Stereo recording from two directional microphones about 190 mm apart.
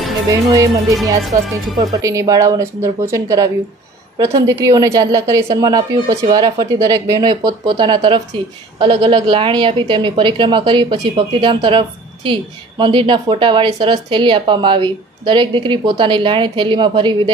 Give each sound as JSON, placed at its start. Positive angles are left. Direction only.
{"t": 0.3, "sound": "a woman's voice", "side_deg": -20}